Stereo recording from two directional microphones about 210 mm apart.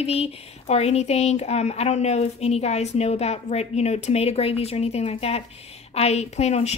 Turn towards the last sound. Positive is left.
turn(degrees=30)  # may be behind; listen again after turning